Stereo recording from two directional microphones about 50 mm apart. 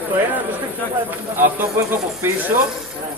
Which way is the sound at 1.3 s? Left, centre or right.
Right.